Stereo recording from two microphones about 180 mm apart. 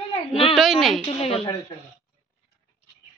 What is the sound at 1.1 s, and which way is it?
Speech, 35° left (ahead or behind).